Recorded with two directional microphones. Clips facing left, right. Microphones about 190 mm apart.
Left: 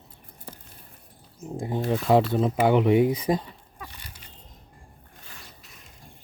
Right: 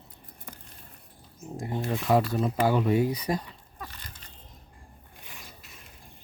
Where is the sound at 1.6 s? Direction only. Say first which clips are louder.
Left 4 dB; 20° left (ahead or behind).